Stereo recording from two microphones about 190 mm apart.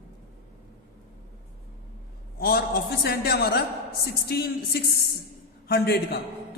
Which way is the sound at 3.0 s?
55° left (ahead or behind).